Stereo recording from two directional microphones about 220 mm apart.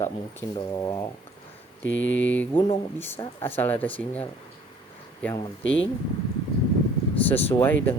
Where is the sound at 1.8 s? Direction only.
60° left (ahead or behind).